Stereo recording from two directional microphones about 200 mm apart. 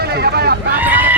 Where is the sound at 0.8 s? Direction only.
10° right (ahead or behind).